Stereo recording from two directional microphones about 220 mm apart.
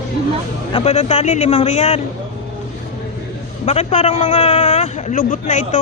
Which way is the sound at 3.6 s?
30° left (ahead or behind).